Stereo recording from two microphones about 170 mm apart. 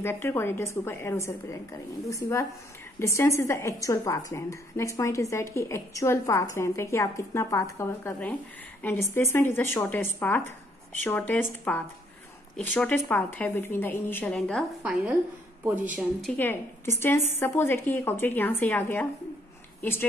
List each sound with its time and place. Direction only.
0.0 s a woman's voice: 15° left (ahead or behind)
14.8 s speech: 5° right (ahead or behind)
17.3 s a woman's voice: 15° left (ahead or behind)